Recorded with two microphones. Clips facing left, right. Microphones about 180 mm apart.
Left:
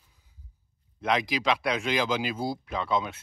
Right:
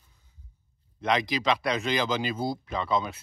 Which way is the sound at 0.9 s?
5° left (ahead or behind).